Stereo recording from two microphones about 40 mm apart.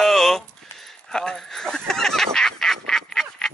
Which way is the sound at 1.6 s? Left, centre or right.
Centre.